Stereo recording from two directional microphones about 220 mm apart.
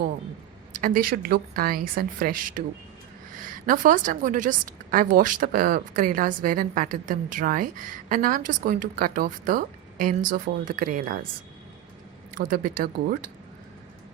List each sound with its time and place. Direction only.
0.7 s a woman's voice: 40° right (ahead or behind)
3.7 s a woman's voice: 35° right (ahead or behind)
12.3 s a woman's voice: 40° right (ahead or behind)